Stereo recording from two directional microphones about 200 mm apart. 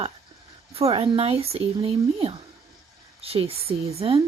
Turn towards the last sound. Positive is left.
turn(degrees=-30)  # may be behind; listen again after turning